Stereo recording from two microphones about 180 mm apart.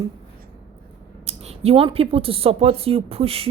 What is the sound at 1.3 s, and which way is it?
A woman's voice, 35° right (ahead or behind).